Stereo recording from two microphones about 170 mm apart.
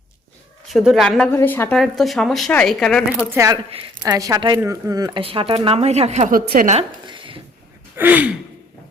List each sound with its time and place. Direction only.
0.7 s speech: centre (ahead or behind)
1.3 s speech: 15° left (ahead or behind)
1.7 s speech: centre (ahead or behind)
3.2 s gasp: 15° right (ahead or behind)
4.0 s speech: 20° right (ahead or behind); by 6.7 s 55° right (ahead or behind)
6.7 s a sound: 30° right (ahead or behind)
7.9 s gasp: 10° right (ahead or behind)